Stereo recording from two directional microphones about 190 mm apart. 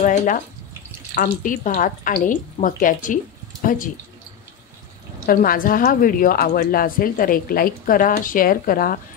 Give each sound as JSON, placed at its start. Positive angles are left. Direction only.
{"t": 0.0, "sound": "a woman's voice", "side_deg": 40}
{"t": 5.2, "sound": "a woman's voice", "side_deg": 50}